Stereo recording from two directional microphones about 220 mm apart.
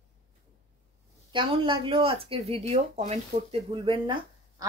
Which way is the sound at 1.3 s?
20° right (ahead or behind).